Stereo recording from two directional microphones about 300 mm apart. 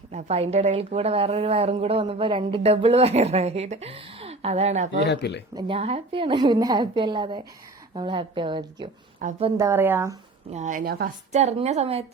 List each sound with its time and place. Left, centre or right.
0.1 s a woman's voice: right
4.9 s speech: left
5.5 s a woman's voice: centre
9.6 s a woman's voice: centre
10.5 s a woman's voice: right